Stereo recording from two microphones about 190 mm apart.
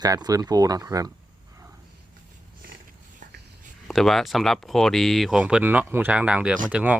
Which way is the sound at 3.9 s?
Centre (ahead or behind).